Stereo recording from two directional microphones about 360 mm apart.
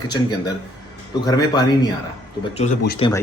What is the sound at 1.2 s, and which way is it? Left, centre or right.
Speech, centre.